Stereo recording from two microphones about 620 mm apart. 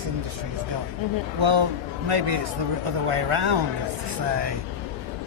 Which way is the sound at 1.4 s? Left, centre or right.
Right.